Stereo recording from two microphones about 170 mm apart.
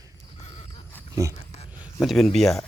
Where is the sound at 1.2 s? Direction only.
20° right (ahead or behind).